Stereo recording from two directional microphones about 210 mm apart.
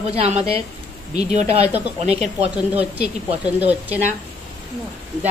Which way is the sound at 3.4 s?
5° right (ahead or behind).